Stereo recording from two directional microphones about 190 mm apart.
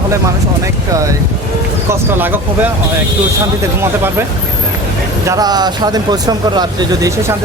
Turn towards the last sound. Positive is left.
turn(degrees=-20)  # may be behind; listen again after turning